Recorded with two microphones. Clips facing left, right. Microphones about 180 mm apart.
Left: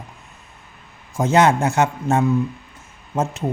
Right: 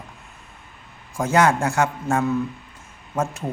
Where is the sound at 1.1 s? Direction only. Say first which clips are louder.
Left 3 dB; 20° left (ahead or behind).